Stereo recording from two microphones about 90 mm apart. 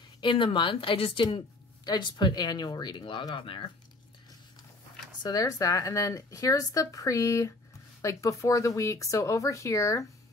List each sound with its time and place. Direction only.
0.2 s speech: 65° left (ahead or behind); by 1.2 s 80° left
1.9 s speech: 55° left (ahead or behind)
5.2 s speech: 40° left (ahead or behind)